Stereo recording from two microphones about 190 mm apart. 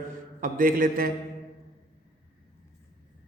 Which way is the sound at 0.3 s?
45° right (ahead or behind).